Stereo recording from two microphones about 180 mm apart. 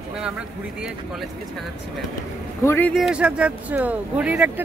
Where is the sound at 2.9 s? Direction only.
5° right (ahead or behind).